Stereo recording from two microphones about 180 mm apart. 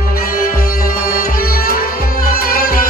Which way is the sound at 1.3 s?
55° left (ahead or behind).